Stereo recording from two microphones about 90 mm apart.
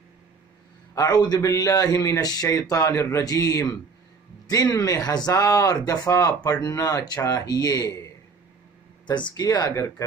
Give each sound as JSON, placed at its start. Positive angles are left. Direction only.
{"t": 0.9, "sound": "a man's voice", "side_deg": 45}
{"t": 4.8, "sound": "a man's voice", "side_deg": 45}
{"t": 9.0, "sound": "speech", "side_deg": 55}
{"t": 9.3, "sound": "speech", "side_deg": 45}